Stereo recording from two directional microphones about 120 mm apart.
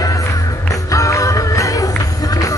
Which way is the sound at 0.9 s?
25° left (ahead or behind).